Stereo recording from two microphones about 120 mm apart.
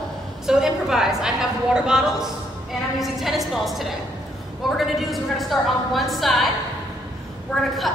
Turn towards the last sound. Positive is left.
turn(degrees=5)  # may be behind; listen again after turning